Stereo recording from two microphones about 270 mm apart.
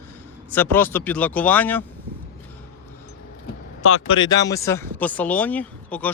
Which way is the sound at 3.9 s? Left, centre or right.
Left.